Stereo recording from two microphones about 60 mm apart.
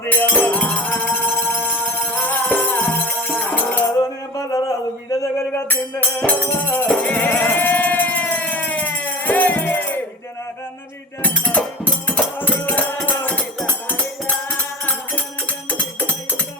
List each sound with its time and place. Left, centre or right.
0.0 s music: left
4.5 s a sound: left
6.2 s music: left
6.8 s siren: left
11.2 s music: left
16.0 s music: left